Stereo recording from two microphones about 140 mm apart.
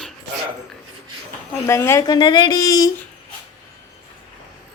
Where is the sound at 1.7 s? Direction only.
20° left (ahead or behind).